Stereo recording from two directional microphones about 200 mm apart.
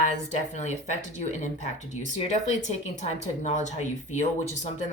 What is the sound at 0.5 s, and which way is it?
Speech, 35° left (ahead or behind).